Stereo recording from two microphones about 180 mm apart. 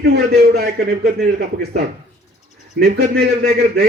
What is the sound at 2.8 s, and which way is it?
A man's voice, 65° right (ahead or behind).